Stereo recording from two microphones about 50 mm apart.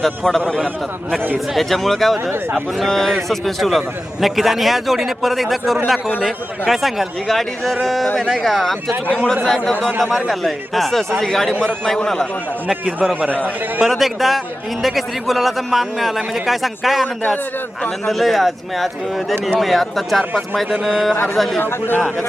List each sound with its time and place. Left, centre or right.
0.0 s a man's voice: centre
8.0 s a man's voice: centre
8.4 s a man's voice: centre
13.8 s a man's voice: centre
21.3 s a man's voice: centre
21.6 s a man's voice: left